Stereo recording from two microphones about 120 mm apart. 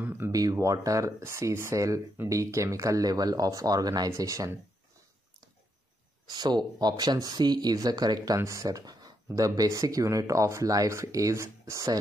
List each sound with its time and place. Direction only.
0.0 s a sound: 15° right (ahead or behind)
0.3 s speech: 30° right (ahead or behind)
6.2 s speech: 35° right (ahead or behind)